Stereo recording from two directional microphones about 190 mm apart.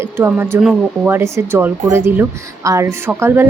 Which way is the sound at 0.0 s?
10° right (ahead or behind).